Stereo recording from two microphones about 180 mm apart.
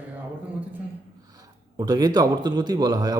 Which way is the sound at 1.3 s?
20° right (ahead or behind).